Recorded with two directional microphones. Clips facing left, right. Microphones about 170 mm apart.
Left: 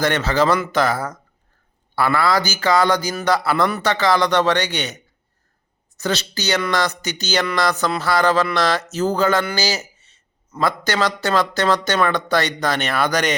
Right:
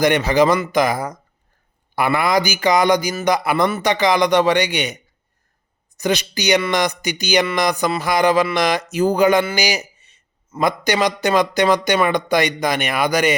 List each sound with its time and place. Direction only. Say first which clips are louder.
0.0 s a man's voice: right 3 dB; 15° right (ahead or behind)
6.0 s a man's voice: right 3 dB; 15° right (ahead or behind)